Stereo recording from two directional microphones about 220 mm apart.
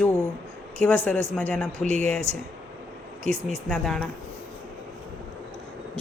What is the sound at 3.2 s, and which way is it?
Speech, 30° right (ahead or behind).